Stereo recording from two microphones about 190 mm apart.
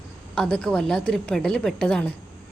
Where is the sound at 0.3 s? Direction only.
5° left (ahead or behind).